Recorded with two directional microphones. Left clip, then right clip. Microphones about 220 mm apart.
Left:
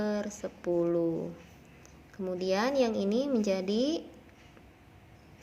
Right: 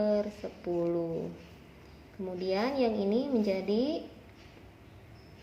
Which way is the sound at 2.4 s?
25° left (ahead or behind).